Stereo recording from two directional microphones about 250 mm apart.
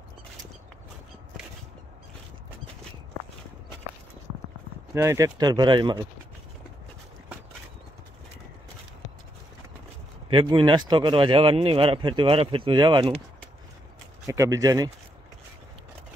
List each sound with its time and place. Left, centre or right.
4.9 s speech: centre
10.3 s speech: centre
14.2 s speech: centre